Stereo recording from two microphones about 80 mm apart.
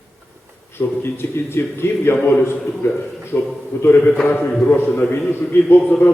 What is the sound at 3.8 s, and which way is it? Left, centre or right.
A man's voice, left.